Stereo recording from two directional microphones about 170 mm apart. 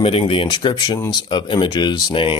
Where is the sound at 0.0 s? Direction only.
35° left (ahead or behind).